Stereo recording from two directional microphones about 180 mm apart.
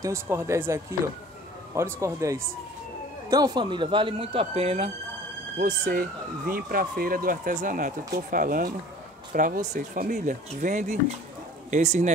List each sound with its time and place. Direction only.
0.0 s speech: 15° right (ahead or behind); by 4.9 s 35° right (ahead or behind)
5.6 s speech: 55° right (ahead or behind)